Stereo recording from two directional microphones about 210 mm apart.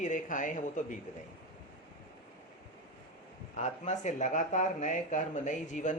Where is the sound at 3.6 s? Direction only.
35° left (ahead or behind).